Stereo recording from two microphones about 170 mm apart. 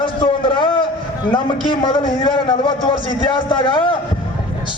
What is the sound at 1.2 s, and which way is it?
A man's voice, 30° left (ahead or behind).